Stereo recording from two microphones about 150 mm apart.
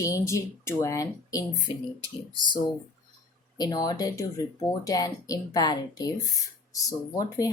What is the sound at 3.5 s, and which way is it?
Speech, 25° left (ahead or behind).